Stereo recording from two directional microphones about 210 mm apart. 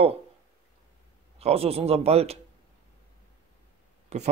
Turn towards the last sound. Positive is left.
turn(degrees=-30)  # may be behind; listen again after turning